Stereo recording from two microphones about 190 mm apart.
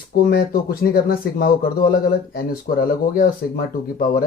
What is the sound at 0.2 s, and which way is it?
Speech, 55° left (ahead or behind).